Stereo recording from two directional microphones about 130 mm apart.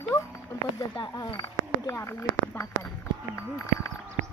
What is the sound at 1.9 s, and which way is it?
Speech, 20° left (ahead or behind).